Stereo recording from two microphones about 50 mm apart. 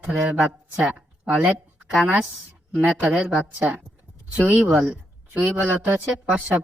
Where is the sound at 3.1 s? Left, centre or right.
Right.